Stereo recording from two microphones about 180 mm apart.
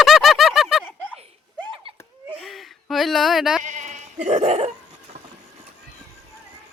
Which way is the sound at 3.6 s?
40° right (ahead or behind).